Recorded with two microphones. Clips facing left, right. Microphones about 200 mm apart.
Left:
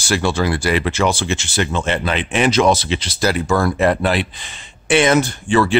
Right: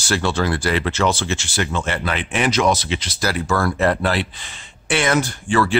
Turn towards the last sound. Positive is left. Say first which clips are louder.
# left 3 dB
turn(degrees=20)  # may be behind; listen again after turning